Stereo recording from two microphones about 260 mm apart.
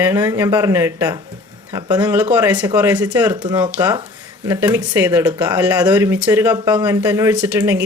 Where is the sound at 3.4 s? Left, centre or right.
Centre.